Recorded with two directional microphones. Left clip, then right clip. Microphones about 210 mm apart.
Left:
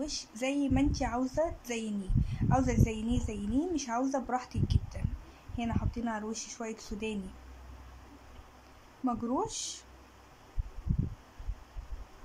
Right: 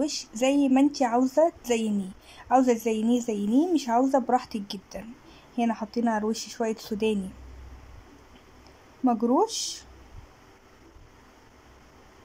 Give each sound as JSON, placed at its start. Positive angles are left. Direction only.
{"t": 0.0, "sound": "a woman's voice", "side_deg": -15}
{"t": 9.0, "sound": "a woman's voice", "side_deg": -15}